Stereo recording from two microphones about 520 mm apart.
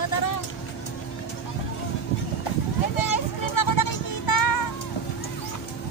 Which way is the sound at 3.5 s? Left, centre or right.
Left.